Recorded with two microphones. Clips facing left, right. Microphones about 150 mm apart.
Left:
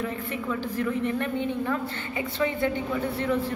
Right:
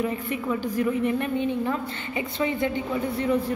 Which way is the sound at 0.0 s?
15° right (ahead or behind).